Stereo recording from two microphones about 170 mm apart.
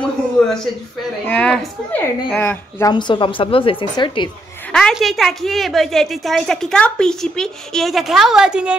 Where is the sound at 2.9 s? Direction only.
25° left (ahead or behind).